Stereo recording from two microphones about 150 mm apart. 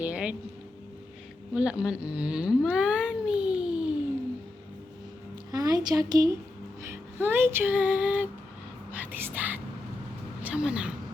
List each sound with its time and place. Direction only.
0.0 s a sound: 10° right (ahead or behind)
1.5 s speech: 5° right (ahead or behind)
5.5 s speech: 25° right (ahead or behind)
6.8 s music: 15° right (ahead or behind)
8.9 s speech: 10° right (ahead or behind)
10.4 s music: 5° right (ahead or behind)